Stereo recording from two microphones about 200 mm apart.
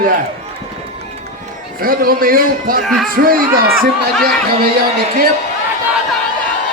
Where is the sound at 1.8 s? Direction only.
45° right (ahead or behind).